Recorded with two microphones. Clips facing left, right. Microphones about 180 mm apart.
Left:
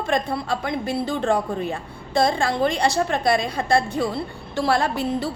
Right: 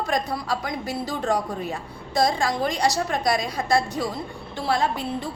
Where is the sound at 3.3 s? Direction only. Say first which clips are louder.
Left 3 dB; 30° left (ahead or behind).